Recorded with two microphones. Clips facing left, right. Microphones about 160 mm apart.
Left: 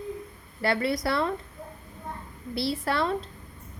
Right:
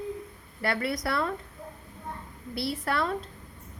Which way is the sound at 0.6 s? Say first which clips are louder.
Left 3 dB; 30° left (ahead or behind).